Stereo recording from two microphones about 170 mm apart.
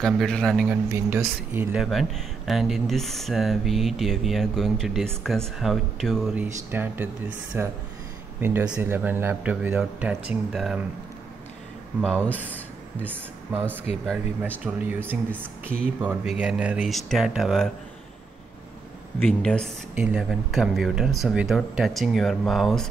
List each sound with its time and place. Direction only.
0.0 s speech: 5° left (ahead or behind)
0.7 s speech: 15° right (ahead or behind); by 6.3 s centre (ahead or behind)
6.3 s a man's voice: 10° right (ahead or behind)
12.0 s speech: 5° left (ahead or behind)
13.0 s speech: 10° right (ahead or behind)
13.9 s speech: 40° left (ahead or behind)
14.6 s a man's voice: 10° right (ahead or behind)
19.1 s speech: 5° left (ahead or behind)